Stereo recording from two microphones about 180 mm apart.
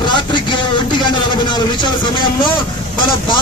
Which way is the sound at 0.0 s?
25° left (ahead or behind).